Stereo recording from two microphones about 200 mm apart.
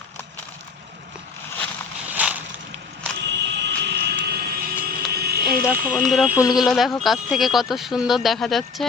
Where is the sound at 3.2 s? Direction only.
60° right (ahead or behind).